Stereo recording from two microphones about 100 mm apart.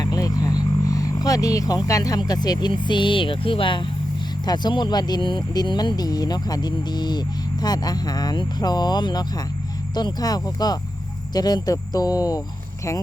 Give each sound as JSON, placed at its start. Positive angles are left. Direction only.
{"t": 0.0, "sound": "speech", "side_deg": 40}